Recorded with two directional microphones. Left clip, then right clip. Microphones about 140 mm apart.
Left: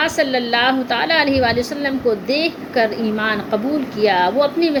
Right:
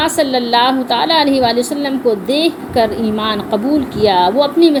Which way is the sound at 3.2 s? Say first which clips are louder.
Right 2 dB; 15° right (ahead or behind).